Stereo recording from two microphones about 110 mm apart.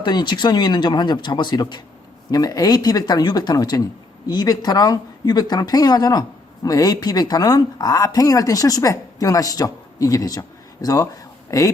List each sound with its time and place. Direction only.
0.0 s speech: 40° left (ahead or behind)